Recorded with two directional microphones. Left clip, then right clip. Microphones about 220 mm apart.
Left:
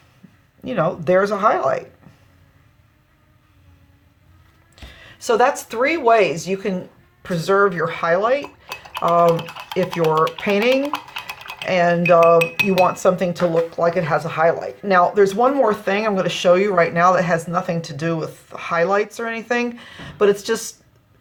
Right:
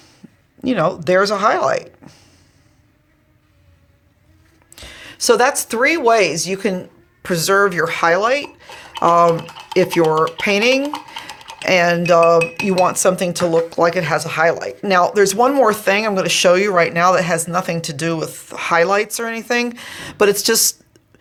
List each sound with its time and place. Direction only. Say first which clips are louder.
0.6 s speech: right 3 dB; 40° right (ahead or behind)
4.7 s speech: right 7 dB; 45° right (ahead or behind)
9.7 s dishes: right 4 dB; 40° right (ahead or behind)